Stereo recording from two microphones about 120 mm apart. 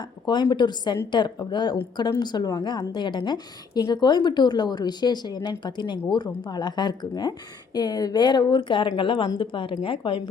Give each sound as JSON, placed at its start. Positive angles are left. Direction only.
{"t": 0.0, "sound": "a woman's voice", "side_deg": 40}